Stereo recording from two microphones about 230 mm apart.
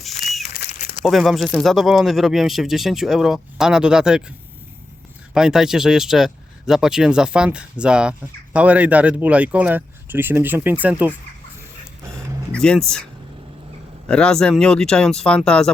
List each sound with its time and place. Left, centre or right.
0.5 s crumpling: left
1.0 s speech: centre
12.5 s speech: centre
14.1 s speech: centre